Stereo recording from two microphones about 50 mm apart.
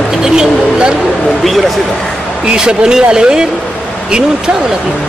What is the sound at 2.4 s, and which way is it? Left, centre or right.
Speech, centre.